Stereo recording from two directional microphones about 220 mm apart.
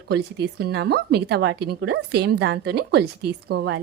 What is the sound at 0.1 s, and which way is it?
A woman's voice, 50° right (ahead or behind).